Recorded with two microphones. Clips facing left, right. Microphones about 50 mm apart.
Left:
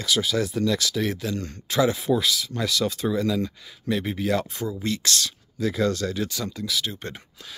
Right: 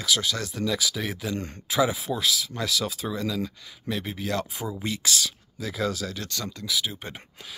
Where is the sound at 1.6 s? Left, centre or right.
Centre.